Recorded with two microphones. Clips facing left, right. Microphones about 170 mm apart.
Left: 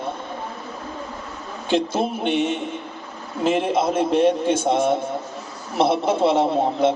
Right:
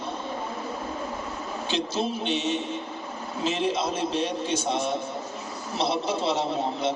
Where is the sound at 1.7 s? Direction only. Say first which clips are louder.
Left 7 dB; 55° left (ahead or behind).